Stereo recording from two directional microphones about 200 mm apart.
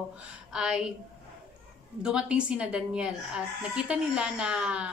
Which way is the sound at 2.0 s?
5° right (ahead or behind).